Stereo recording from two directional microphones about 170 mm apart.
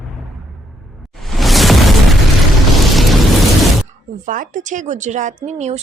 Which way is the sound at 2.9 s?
Centre (ahead or behind).